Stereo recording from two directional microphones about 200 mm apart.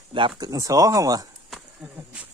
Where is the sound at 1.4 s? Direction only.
5° right (ahead or behind).